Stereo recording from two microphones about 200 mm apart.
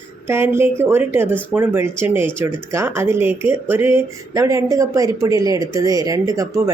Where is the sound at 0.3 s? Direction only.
10° right (ahead or behind).